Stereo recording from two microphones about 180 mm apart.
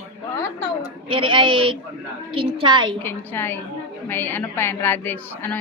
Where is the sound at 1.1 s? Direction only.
30° right (ahead or behind).